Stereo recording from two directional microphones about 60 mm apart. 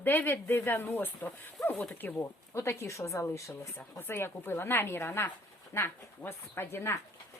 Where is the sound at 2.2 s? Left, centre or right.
Left.